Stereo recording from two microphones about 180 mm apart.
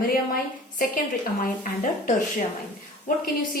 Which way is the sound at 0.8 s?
50° left (ahead or behind).